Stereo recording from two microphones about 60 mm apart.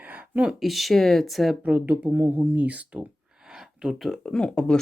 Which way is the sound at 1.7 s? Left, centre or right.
Right.